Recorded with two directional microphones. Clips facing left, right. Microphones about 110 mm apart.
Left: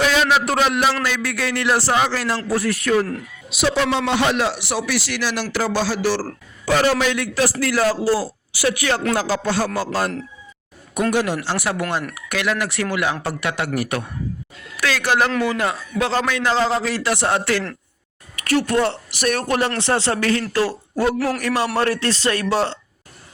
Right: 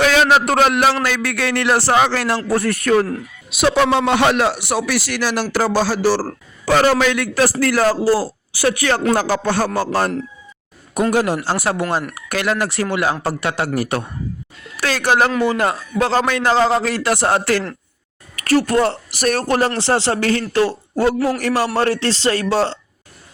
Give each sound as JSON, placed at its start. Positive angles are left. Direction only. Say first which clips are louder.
{"t": 0.0, "sound": "a man's voice", "louder": "right 4 dB", "side_deg": -60}
{"t": 6.7, "sound": "a man's voice", "louder": "right 3 dB", "side_deg": -85}
{"t": 7.6, "sound": "speech", "louder": "right 3 dB", "side_deg": -50}
{"t": 9.1, "sound": "speech", "louder": "right 3 dB", "side_deg": -55}
{"t": 11.1, "sound": "speech", "louder": "right 3 dB", "side_deg": -45}
{"t": 14.8, "sound": "a sound", "louder": "right 3 dB", "side_deg": -35}
{"t": 15.4, "sound": "a man's voice", "louder": "right 4 dB", "side_deg": -40}